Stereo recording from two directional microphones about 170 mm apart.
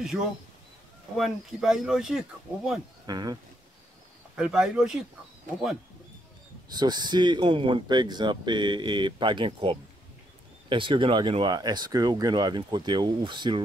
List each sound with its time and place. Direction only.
0.0 s speech: 5° right (ahead or behind)
3.1 s speech: 25° right (ahead or behind)
4.4 s speech: 5° right (ahead or behind)
6.7 s speech: 25° right (ahead or behind)